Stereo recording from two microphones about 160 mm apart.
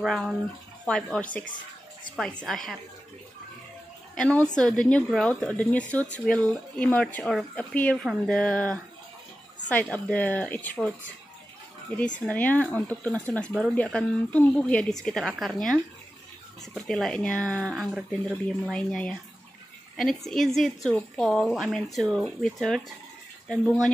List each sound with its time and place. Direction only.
0.0 s a woman's voice: centre (ahead or behind)
2.4 s a woman's voice: centre (ahead or behind)
4.1 s a woman's voice: 5° left (ahead or behind)
12.3 s a woman's voice: 10° left (ahead or behind)